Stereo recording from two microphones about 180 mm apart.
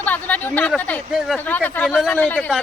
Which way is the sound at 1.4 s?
10° left (ahead or behind).